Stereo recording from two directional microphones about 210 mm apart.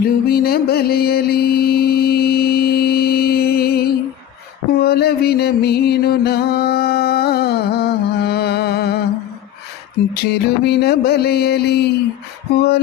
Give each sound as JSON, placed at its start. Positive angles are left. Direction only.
{"t": 0.3, "sound": "mantra", "side_deg": 45}
{"t": 4.8, "sound": "music", "side_deg": 50}
{"t": 10.2, "sound": "a sound", "side_deg": 50}